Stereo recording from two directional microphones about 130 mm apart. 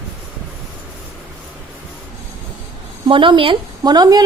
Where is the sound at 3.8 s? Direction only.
30° right (ahead or behind).